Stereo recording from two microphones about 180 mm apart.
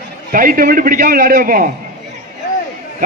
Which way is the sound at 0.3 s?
50° right (ahead or behind).